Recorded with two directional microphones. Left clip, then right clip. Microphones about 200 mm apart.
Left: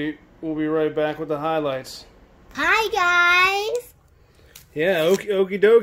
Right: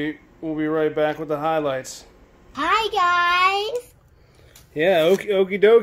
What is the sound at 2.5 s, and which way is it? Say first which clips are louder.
A child's voice: even; 45° left (ahead or behind).